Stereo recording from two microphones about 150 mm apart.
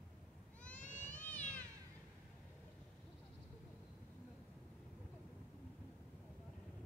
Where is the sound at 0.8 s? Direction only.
55° left (ahead or behind).